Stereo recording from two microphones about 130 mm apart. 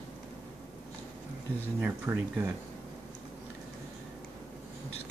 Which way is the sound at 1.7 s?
15° right (ahead or behind).